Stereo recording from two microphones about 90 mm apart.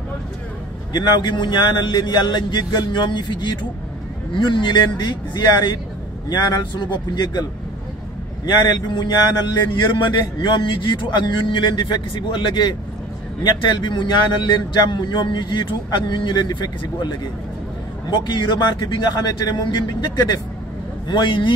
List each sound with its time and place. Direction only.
0.9 s a man's voice: 55° left (ahead or behind)
8.5 s a man's voice: 55° left (ahead or behind)
10.4 s a man's voice: 65° left (ahead or behind)
18.1 s a man's voice: 60° left (ahead or behind)
19.1 s a man's voice: 50° left (ahead or behind)
21.1 s a man's voice: 65° left (ahead or behind)